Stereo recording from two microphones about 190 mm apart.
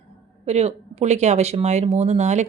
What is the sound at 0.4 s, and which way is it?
Speech, 35° right (ahead or behind).